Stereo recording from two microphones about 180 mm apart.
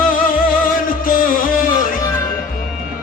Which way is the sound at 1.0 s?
50° left (ahead or behind).